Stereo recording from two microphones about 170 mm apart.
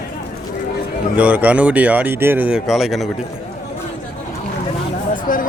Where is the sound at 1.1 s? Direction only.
10° right (ahead or behind).